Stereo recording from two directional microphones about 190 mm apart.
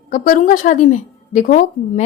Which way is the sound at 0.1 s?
40° left (ahead or behind).